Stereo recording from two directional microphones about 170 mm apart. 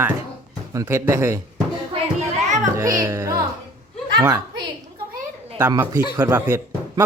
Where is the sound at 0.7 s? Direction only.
20° right (ahead or behind).